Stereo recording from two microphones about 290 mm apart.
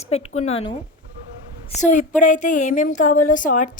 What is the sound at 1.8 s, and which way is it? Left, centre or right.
Speech, left.